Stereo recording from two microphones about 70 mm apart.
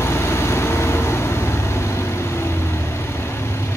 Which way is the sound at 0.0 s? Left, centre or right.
Left.